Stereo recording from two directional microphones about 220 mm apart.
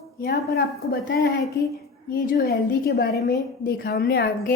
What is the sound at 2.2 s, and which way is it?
A woman's voice, 40° left (ahead or behind).